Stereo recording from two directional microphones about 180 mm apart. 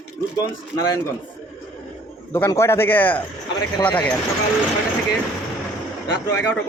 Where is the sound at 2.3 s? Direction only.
10° left (ahead or behind).